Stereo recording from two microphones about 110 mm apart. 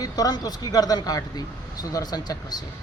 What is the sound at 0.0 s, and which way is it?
A man's voice, 35° left (ahead or behind).